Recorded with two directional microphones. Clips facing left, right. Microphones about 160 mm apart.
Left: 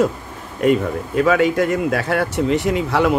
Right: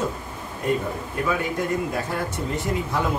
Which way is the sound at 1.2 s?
90° left.